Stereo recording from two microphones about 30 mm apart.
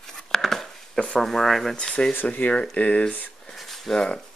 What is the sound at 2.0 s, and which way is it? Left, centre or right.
Speech, left.